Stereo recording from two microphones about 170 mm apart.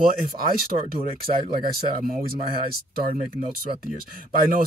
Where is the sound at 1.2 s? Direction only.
60° right (ahead or behind).